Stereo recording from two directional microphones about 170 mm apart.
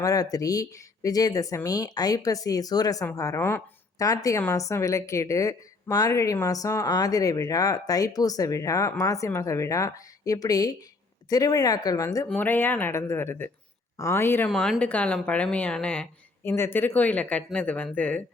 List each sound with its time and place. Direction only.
0.0 s a woman's voice: 20° left (ahead or behind)
14.5 s speech: centre (ahead or behind)